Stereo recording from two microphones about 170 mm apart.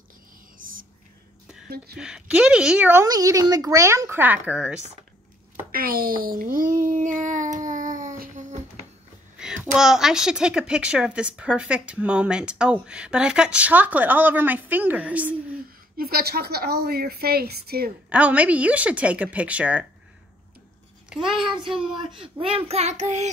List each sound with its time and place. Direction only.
0.6 s whispering: 55° right (ahead or behind)
2.0 s a woman's voice: 5° right (ahead or behind)
5.7 s child singing: 60° right (ahead or behind)
9.4 s a woman's voice: 5° right (ahead or behind)
16.0 s a woman's voice: 65° right (ahead or behind)
18.1 s a woman's voice: 10° right (ahead or behind)
21.3 s speech: centre (ahead or behind)
21.7 s child singing: 30° right (ahead or behind)